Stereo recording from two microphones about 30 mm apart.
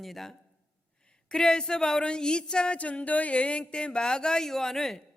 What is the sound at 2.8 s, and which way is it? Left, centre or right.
A woman's voice, left.